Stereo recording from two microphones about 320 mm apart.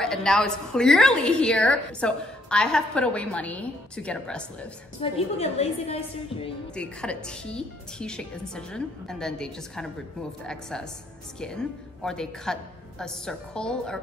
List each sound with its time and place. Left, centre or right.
0.0 s a woman's voice: centre
5.0 s a woman's voice: centre
6.7 s a woman's voice: centre